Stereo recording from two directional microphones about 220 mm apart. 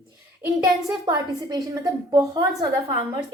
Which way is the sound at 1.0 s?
20° right (ahead or behind).